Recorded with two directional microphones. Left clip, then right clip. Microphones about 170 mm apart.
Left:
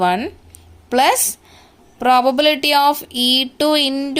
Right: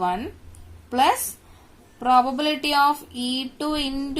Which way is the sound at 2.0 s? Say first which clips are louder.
Left 6 dB; 50° left (ahead or behind).